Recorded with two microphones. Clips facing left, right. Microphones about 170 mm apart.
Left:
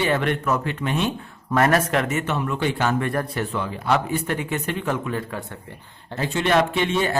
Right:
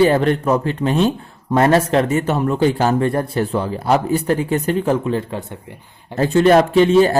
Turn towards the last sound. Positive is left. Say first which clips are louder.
# right 10 dB
turn(degrees=-35)  # may be behind; listen again after turning